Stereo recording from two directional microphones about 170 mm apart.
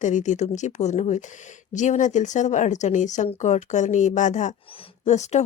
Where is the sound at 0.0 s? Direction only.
45° left (ahead or behind).